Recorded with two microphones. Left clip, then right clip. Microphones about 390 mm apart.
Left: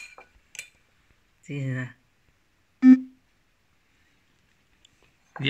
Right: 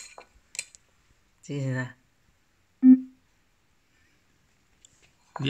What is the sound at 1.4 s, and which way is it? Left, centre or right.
Speech, centre.